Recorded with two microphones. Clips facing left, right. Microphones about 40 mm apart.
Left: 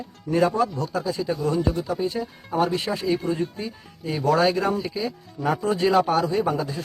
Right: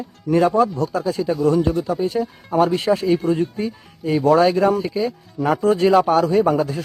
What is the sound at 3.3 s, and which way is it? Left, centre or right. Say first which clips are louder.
Speech: right 6 dB; right.